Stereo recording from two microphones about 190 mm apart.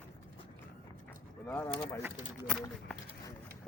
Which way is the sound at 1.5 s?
15° left (ahead or behind).